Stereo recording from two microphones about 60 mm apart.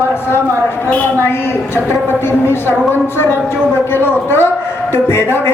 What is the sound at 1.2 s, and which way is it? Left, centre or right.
A woman's voice, left.